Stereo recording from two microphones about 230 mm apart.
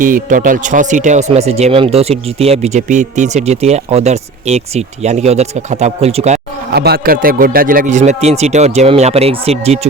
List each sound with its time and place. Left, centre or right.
0.0 s speech: right
6.7 s speech: right